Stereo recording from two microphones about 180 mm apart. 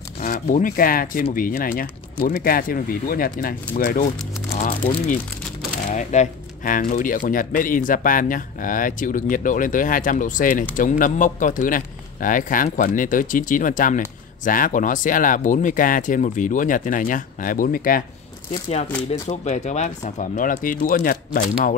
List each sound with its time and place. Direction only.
0.2 s speech: 50° left (ahead or behind)
4.6 s speech: 40° left (ahead or behind)
19.2 s speech: 40° left (ahead or behind)